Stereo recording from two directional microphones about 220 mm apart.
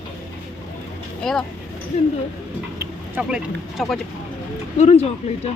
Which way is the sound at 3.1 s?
5° right (ahead or behind).